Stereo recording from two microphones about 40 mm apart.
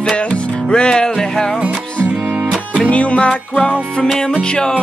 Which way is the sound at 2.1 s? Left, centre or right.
Right.